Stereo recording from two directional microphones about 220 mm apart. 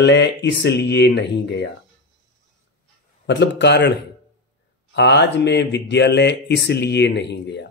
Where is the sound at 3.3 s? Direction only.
55° left (ahead or behind).